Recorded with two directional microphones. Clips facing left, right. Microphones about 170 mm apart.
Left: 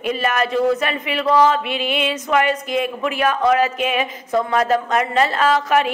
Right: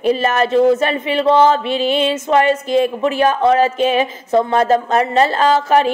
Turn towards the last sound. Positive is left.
turn(degrees=-30)  # may be behind; listen again after turning